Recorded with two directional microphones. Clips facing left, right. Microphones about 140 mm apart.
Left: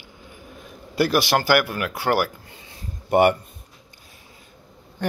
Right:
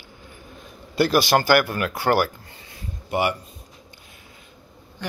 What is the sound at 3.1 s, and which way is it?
Speech, 50° left (ahead or behind).